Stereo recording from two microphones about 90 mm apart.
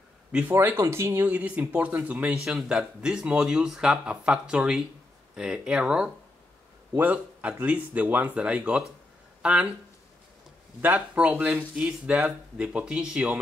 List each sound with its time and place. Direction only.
0.3 s speech: 20° right (ahead or behind)
10.8 s speech: 20° right (ahead or behind)